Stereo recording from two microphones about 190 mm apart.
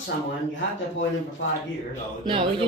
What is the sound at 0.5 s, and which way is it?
Speech, 80° left.